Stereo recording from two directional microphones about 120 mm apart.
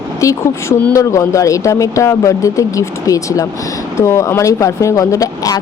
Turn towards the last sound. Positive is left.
turn(degrees=30)  # may be behind; listen again after turning